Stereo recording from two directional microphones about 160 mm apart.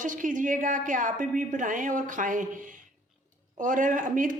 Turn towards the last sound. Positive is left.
turn(degrees=-55)  # may be behind; listen again after turning